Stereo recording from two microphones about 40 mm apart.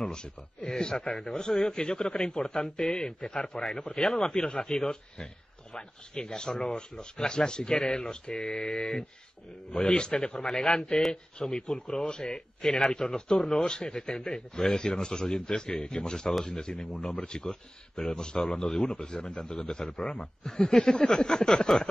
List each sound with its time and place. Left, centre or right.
0.7 s a man's voice: centre
4.5 s speech: left
4.7 s speech: centre
10.4 s a man's voice: centre